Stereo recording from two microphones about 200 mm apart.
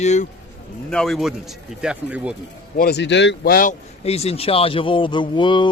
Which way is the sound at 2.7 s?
50° left (ahead or behind).